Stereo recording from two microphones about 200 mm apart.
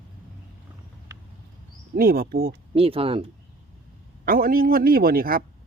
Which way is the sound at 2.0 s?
45° right (ahead or behind).